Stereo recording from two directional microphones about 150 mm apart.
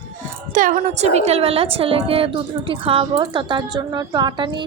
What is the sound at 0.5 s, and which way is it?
A woman's voice, 55° right (ahead or behind).